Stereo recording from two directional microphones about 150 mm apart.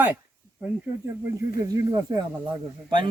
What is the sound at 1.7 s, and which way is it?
Speech, 25° right (ahead or behind).